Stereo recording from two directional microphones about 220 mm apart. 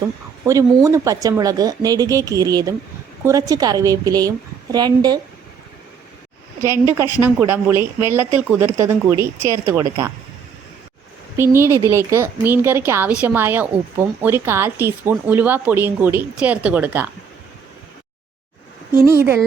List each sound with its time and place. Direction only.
0.4 s speech: 15° right (ahead or behind)
6.7 s speech: 10° right (ahead or behind)
11.3 s speech: 10° right (ahead or behind)
19.0 s speech: 10° right (ahead or behind)